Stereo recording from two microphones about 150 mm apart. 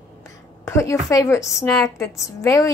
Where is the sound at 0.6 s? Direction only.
20° left (ahead or behind).